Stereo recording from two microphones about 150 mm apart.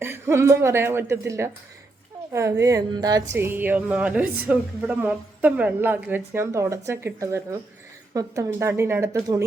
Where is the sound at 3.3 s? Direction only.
15° right (ahead or behind).